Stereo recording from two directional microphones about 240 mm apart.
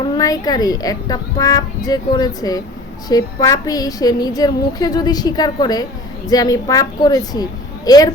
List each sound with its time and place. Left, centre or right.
0.2 s a woman's voice: centre